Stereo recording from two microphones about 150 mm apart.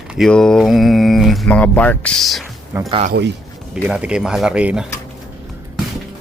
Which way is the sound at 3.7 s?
5° right (ahead or behind).